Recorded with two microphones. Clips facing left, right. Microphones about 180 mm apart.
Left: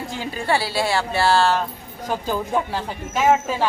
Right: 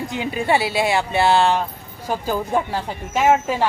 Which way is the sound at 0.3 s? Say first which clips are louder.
Right 2 dB; 20° right (ahead or behind).